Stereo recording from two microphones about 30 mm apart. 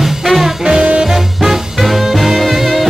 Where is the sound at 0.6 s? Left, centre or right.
Right.